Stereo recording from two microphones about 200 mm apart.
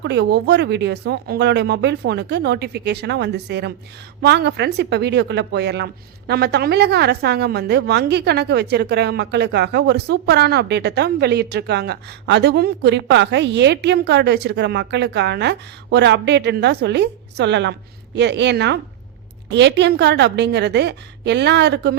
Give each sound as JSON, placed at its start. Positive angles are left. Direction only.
{"t": 0.0, "sound": "speech", "side_deg": -60}